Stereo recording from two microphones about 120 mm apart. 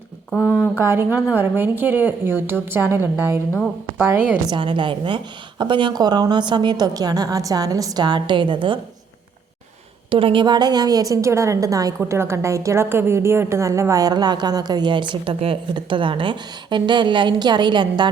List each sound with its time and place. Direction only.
0.3 s speech: 15° left (ahead or behind)
0.8 s a woman's voice: 20° right (ahead or behind)
4.4 s a woman's voice: 45° right (ahead or behind)
10.1 s a woman's voice: 45° right (ahead or behind)